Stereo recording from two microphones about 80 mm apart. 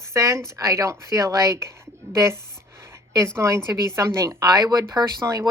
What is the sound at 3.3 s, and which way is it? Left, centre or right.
Speech, right.